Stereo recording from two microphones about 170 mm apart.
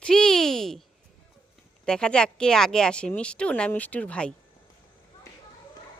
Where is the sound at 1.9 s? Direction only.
5° left (ahead or behind).